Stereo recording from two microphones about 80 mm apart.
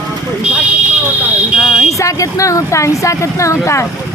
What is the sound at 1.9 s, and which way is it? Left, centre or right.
A woman's voice, left.